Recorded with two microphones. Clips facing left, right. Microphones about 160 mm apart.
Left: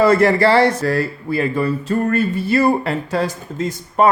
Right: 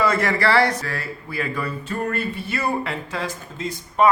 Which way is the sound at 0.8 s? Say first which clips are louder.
Left 11 dB; 40° left (ahead or behind).